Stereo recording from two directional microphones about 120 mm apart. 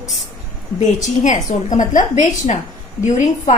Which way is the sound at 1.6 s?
90° left.